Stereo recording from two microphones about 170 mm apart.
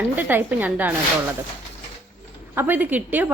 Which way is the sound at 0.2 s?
10° right (ahead or behind).